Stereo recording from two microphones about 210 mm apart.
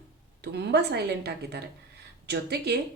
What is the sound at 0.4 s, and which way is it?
Speech, 55° right (ahead or behind).